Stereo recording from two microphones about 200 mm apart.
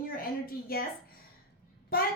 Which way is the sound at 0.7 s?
50° left (ahead or behind).